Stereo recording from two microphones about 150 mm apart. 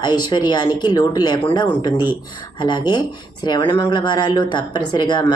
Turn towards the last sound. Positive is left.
turn(degrees=30)  # may be behind; listen again after turning